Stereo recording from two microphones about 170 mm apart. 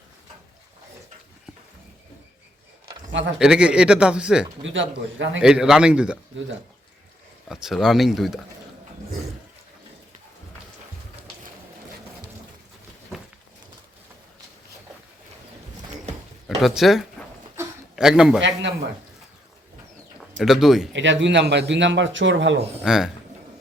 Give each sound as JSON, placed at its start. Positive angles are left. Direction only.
{"t": 3.1, "sound": "speech", "side_deg": -90}
{"t": 3.3, "sound": "speech", "side_deg": -5}
{"t": 4.6, "sound": "speech", "side_deg": -90}
{"t": 5.4, "sound": "speech", "side_deg": -5}
{"t": 7.4, "sound": "speech", "side_deg": 0}
{"t": 16.6, "sound": "a man's voice", "side_deg": 0}
{"t": 20.4, "sound": "speech", "side_deg": 0}
{"t": 20.9, "sound": "speech", "side_deg": -90}
{"t": 22.8, "sound": "speech", "side_deg": -5}